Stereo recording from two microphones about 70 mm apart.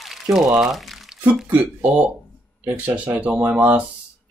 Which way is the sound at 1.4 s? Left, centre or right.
Right.